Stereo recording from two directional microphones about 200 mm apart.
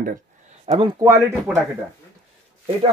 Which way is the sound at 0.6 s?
30° right (ahead or behind).